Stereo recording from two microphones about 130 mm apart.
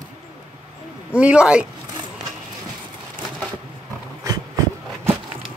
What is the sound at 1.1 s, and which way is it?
Speech, 10° right (ahead or behind).